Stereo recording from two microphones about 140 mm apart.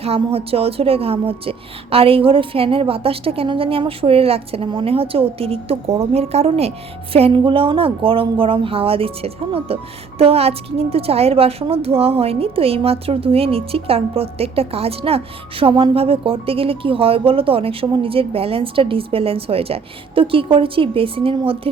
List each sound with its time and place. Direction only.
0.0 s a woman's voice: 45° right (ahead or behind)